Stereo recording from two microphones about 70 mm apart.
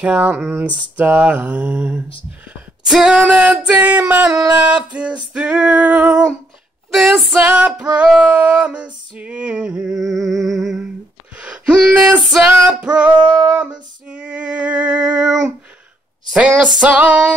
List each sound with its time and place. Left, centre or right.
0.0 s mantra: right
2.8 s female singing: centre
3.5 s mantra: right
4.0 s female singing: centre
6.9 s a sound: centre
7.4 s female singing: centre
9.9 s a sound: centre
11.3 s wail: centre
12.3 s female singing: centre
13.5 s mantra: centre
16.3 s mantra: centre